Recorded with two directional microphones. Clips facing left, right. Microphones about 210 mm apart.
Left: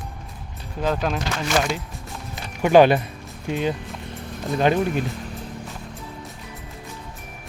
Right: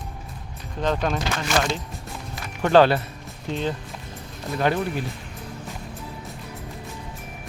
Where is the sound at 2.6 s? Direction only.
15° left (ahead or behind).